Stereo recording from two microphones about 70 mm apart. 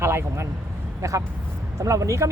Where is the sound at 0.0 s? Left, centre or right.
Right.